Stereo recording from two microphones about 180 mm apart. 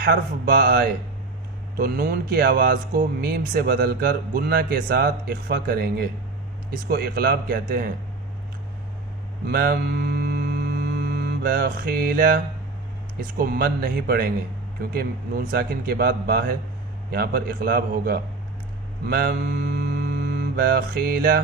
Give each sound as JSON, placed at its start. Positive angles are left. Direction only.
{"t": 0.0, "sound": "speech", "side_deg": -55}
{"t": 9.5, "sound": "hum", "side_deg": -60}
{"t": 13.1, "sound": "speech", "side_deg": -55}
{"t": 19.0, "sound": "music", "side_deg": -60}